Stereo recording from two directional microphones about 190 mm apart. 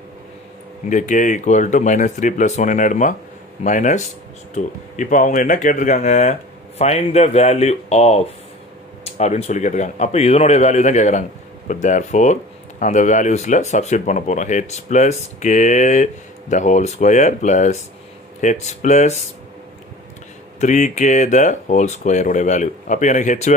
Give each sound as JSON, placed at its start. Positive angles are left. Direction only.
{"t": 0.8, "sound": "speech", "side_deg": 40}
{"t": 20.6, "sound": "speech", "side_deg": 40}